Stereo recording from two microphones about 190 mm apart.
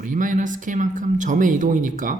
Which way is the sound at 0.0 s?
45° right (ahead or behind).